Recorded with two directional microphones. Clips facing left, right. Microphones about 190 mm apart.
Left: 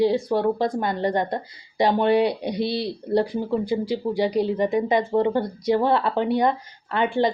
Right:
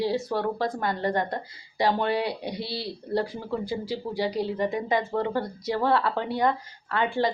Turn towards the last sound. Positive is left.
turn(degrees=20)  # may be behind; listen again after turning